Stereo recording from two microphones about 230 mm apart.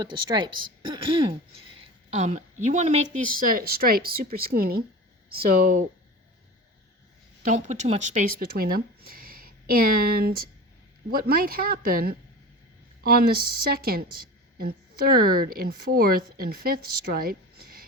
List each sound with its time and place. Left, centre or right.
0.0 s a woman's voice: centre; by 5.8 s right
7.4 s a woman's voice: right